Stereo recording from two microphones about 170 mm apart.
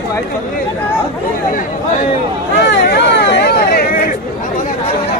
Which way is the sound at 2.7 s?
85° left.